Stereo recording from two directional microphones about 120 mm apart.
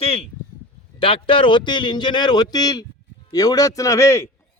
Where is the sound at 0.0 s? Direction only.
55° left (ahead or behind).